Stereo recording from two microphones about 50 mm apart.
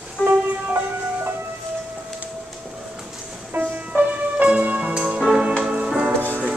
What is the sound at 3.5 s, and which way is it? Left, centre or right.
Music, right.